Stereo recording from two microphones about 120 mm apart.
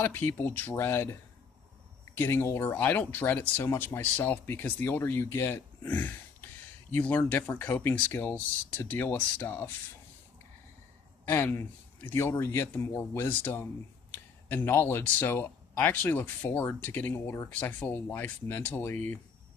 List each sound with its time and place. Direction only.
0.0 s a man's voice: 15° left (ahead or behind)
2.1 s a man's voice: 20° left (ahead or behind)
11.3 s a man's voice: 20° left (ahead or behind)